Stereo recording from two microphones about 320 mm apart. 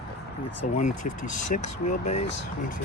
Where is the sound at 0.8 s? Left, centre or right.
Left.